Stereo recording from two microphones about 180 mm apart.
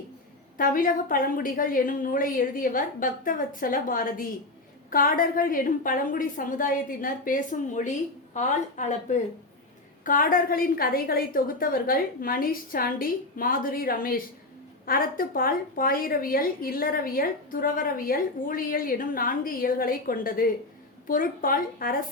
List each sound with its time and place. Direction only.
0.5 s a woman's voice: 50° left (ahead or behind)